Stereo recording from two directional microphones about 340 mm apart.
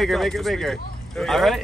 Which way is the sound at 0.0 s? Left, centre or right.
Centre.